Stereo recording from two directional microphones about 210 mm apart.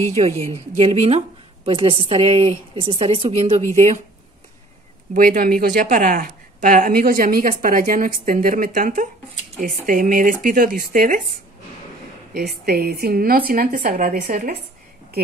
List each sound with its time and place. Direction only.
0.0 s a woman's voice: 30° right (ahead or behind)
5.1 s speech: 40° right (ahead or behind)
12.4 s a woman's voice: 45° right (ahead or behind)